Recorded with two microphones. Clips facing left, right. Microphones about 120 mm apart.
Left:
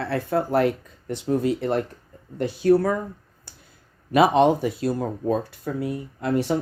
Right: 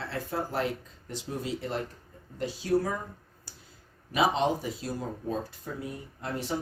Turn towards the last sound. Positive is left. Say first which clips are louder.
# left 11 dB
turn(degrees=70)  # may be behind; listen again after turning